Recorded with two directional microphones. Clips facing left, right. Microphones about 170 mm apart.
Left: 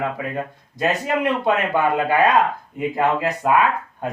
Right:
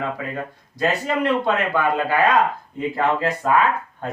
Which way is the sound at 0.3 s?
15° left (ahead or behind).